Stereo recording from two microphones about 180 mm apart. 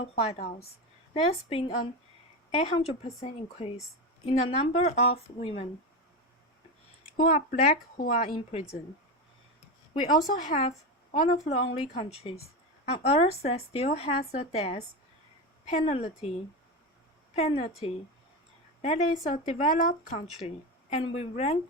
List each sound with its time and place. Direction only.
0.0 s a woman's voice: 35° left (ahead or behind)
7.2 s speech: 45° left (ahead or behind)
8.4 s a woman's voice: 35° left (ahead or behind)
10.3 s a woman's voice: 40° left (ahead or behind)
17.3 s a woman's voice: 35° left (ahead or behind)